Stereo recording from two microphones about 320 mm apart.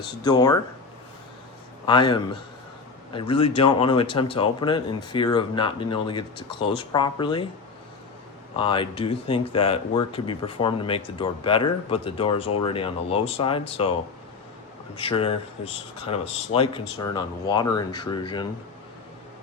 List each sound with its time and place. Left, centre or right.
0.1 s speech: centre
1.9 s speech: centre
8.5 s speech: centre
14.9 s speech: centre